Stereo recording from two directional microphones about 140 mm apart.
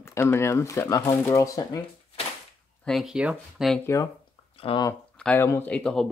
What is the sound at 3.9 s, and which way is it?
Speech, 20° left (ahead or behind).